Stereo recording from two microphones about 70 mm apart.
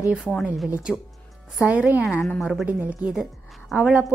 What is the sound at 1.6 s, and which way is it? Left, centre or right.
Speech, right.